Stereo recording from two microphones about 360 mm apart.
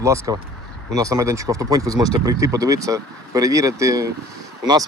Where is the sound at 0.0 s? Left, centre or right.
Centre.